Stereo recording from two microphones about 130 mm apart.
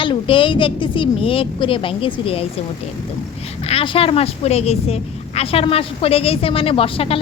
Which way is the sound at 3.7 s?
45° left (ahead or behind).